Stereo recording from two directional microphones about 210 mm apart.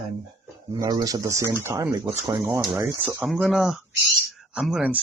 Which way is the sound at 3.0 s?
5° right (ahead or behind).